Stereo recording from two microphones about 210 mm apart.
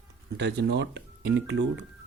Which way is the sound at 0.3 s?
55° right (ahead or behind).